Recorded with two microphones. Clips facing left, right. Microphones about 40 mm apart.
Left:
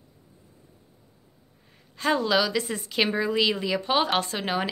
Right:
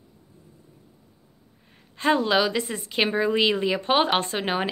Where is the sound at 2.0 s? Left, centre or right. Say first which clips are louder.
Right 2 dB; right.